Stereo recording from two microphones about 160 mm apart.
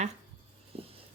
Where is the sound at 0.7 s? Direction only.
35° right (ahead or behind).